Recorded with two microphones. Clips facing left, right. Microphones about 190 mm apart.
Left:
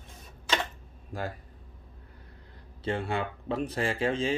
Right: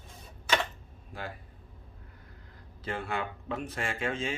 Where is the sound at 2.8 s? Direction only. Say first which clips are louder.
Left 4 dB; 30° left (ahead or behind).